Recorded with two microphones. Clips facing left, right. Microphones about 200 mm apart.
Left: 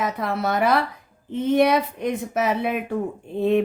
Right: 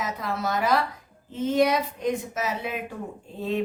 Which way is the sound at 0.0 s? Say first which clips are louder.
Left 5 dB; 60° left (ahead or behind).